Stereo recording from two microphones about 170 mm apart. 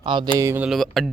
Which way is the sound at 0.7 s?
Centre (ahead or behind).